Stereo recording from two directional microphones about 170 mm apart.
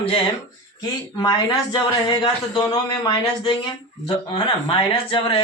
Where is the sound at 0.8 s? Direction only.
25° left (ahead or behind).